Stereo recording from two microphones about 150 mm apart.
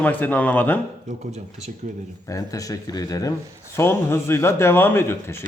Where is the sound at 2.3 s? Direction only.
25° left (ahead or behind).